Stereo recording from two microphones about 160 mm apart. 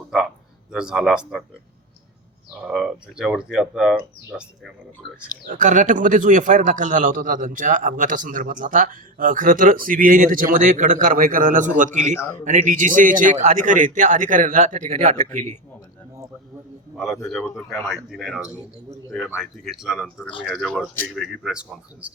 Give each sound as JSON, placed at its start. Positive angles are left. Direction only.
{"t": 0.7, "sound": "speech", "side_deg": -5}
{"t": 2.6, "sound": "speech", "side_deg": -5}
{"t": 5.5, "sound": "a man's voice", "side_deg": -55}
{"t": 12.1, "sound": "a man's voice", "side_deg": 15}
{"t": 12.5, "sound": "a man's voice", "side_deg": -55}
{"t": 16.9, "sound": "a man's voice", "side_deg": 0}